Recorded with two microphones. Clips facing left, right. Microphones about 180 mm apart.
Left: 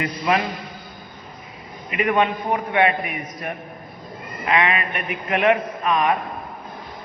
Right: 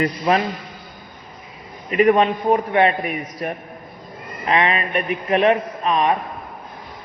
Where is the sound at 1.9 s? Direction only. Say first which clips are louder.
Right 5 dB; 40° right (ahead or behind).